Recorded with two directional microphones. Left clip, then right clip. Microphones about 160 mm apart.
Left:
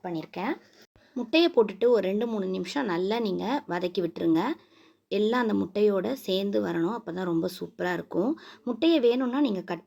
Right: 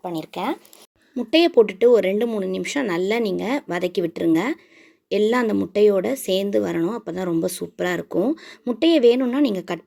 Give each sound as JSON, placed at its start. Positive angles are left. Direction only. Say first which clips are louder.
{"t": 0.0, "sound": "speech", "louder": "right 6 dB", "side_deg": -25}